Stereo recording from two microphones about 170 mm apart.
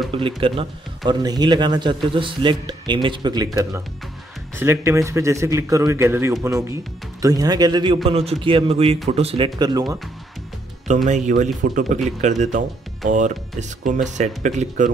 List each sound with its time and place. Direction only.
0.1 s a man's voice: 30° right (ahead or behind)
4.6 s a man's voice: 15° right (ahead or behind)
11.1 s speech: 45° right (ahead or behind)